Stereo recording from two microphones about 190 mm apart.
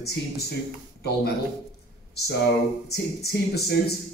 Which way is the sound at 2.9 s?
55° left (ahead or behind).